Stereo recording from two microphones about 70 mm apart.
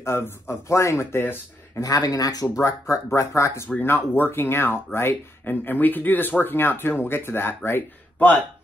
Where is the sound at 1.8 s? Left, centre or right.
Left.